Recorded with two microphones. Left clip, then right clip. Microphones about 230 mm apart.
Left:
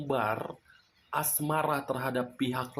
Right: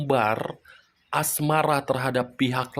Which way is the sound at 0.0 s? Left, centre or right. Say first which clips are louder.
Right 8 dB; right.